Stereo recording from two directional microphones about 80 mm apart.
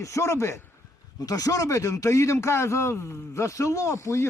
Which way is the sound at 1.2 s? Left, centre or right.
Left.